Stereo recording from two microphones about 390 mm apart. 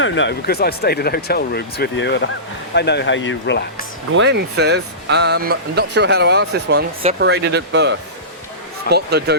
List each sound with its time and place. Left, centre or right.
0.0 s speech: left
4.1 s speech: right